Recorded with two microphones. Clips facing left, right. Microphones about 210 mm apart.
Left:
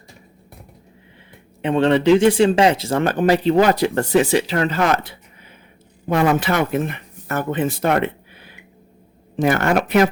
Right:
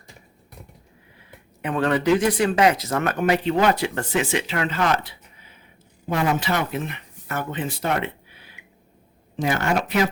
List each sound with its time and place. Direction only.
1.6 s speech: 25° left (ahead or behind); by 5.1 s 45° left (ahead or behind)
6.1 s speech: 55° left (ahead or behind)
9.3 s speech: 55° left (ahead or behind)